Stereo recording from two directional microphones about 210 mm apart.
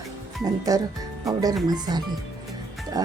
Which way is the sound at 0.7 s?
15° right (ahead or behind).